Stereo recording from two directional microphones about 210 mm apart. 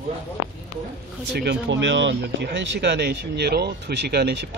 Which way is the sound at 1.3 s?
50° right (ahead or behind).